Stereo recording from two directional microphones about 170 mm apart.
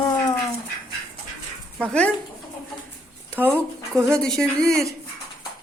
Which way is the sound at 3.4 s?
10° right (ahead or behind).